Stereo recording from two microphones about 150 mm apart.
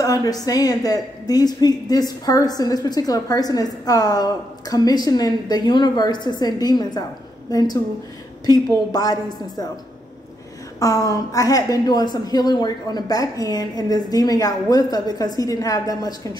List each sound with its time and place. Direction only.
0.0 s a woman's voice: 25° left (ahead or behind)
10.8 s a woman's voice: 25° left (ahead or behind)